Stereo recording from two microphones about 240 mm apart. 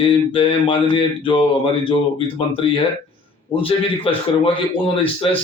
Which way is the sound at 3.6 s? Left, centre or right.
Left.